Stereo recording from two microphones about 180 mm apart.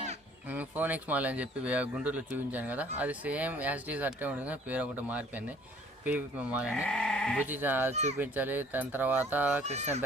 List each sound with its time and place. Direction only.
0.4 s speech: 10° right (ahead or behind)
6.8 s speech: 5° left (ahead or behind)
7.4 s speech: 10° right (ahead or behind)
9.6 s speech: 40° right (ahead or behind)